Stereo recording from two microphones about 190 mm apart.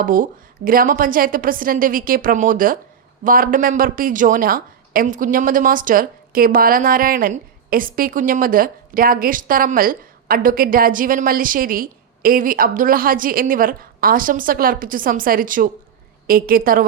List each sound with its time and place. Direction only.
0.0 s a woman's voice: 45° right (ahead or behind)